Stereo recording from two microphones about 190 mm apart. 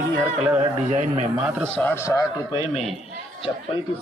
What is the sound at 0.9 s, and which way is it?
Speech, 40° right (ahead or behind).